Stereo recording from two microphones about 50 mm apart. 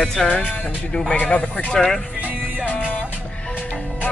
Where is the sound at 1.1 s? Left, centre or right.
Left.